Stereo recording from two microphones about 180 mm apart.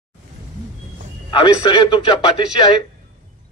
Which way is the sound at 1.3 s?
25° left (ahead or behind).